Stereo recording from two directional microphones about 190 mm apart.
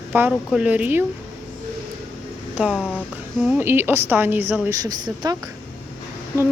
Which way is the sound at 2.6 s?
5° right (ahead or behind).